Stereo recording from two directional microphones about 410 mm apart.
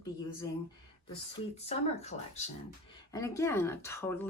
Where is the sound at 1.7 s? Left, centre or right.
Centre.